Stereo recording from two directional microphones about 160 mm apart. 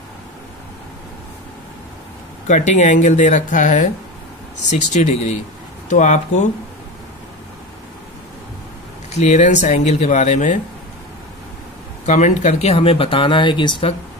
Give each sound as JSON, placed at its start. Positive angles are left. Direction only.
{"t": 2.4, "sound": "speech", "side_deg": 50}
{"t": 9.1, "sound": "speech", "side_deg": 45}
{"t": 12.1, "sound": "speech", "side_deg": 45}